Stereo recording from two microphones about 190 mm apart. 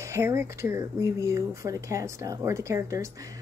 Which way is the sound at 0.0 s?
15° right (ahead or behind).